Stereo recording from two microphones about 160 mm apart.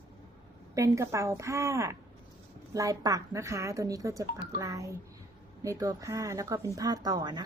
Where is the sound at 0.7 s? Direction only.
20° right (ahead or behind).